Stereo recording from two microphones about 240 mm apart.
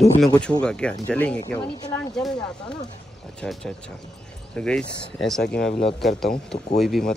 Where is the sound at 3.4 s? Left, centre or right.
Centre.